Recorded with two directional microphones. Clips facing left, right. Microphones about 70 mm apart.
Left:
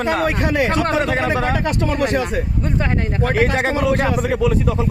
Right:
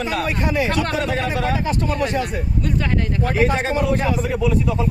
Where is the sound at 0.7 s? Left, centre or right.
Left.